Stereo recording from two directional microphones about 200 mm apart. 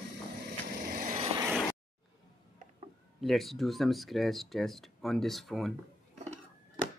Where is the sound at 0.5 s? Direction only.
50° right (ahead or behind).